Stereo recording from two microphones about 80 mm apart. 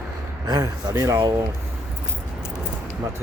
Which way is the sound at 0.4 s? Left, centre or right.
Right.